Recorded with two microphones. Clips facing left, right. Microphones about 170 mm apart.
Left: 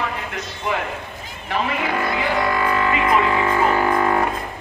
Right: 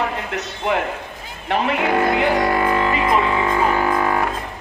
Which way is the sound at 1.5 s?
65° right (ahead or behind).